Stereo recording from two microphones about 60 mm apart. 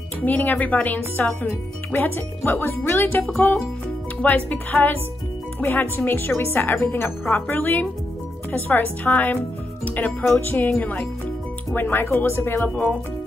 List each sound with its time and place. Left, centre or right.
0.2 s a woman's voice: left
10.2 s speech: left
12.6 s a woman's voice: left